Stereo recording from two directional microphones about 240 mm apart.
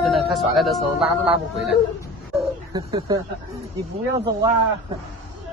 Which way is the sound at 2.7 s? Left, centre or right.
Centre.